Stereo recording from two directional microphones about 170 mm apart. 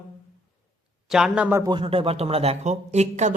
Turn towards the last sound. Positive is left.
turn(degrees=-40)  # may be behind; listen again after turning